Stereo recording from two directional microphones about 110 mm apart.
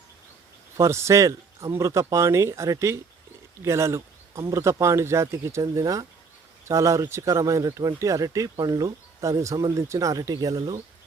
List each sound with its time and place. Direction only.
0.8 s speech: 25° right (ahead or behind)